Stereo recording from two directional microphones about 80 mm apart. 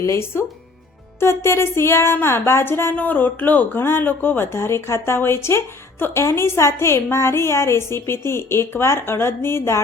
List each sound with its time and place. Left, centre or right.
0.0 s speech: left